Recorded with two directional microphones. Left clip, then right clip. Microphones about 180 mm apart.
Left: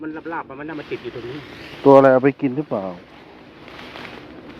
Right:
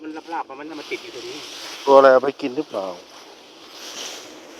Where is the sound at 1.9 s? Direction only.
5° left (ahead or behind).